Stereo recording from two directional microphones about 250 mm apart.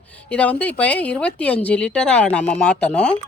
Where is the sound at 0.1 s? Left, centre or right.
Centre.